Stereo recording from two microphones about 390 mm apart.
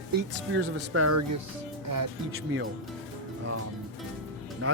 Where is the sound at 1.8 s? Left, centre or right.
Right.